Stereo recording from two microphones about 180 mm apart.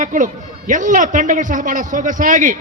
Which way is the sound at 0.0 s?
45° right (ahead or behind).